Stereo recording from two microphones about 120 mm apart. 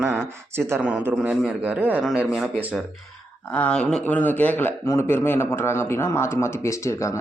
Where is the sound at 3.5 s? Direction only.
10° left (ahead or behind).